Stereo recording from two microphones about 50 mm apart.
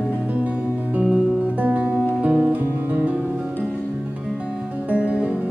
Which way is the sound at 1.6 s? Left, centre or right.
Right.